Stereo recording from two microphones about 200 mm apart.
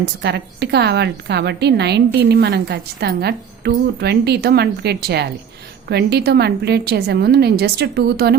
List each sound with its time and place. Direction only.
0.0 s a woman's voice: 55° right (ahead or behind)